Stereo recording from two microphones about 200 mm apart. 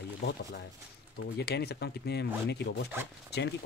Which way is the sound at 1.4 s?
55° left (ahead or behind).